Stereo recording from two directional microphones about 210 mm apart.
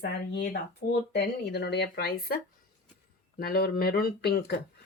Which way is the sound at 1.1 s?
50° left (ahead or behind).